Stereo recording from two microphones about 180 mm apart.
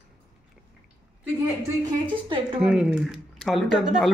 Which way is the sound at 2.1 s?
30° right (ahead or behind).